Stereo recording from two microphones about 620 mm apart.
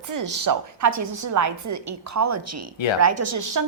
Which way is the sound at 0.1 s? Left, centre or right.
Right.